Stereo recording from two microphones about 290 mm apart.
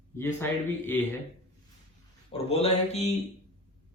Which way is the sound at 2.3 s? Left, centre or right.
Left.